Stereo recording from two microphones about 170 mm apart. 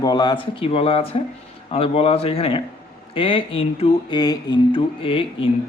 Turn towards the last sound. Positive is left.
turn(degrees=30)  # may be behind; listen again after turning